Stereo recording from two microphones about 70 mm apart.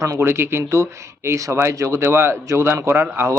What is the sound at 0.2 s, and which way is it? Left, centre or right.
Speech, right.